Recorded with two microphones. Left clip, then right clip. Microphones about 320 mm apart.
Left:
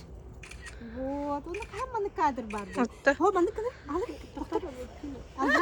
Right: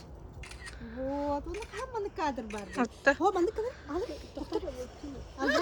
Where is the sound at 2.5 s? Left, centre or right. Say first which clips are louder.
Left 2 dB; centre.